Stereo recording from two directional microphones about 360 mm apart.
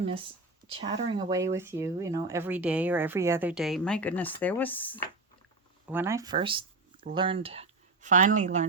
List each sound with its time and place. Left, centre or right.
0.0 s speech: centre
5.9 s speech: centre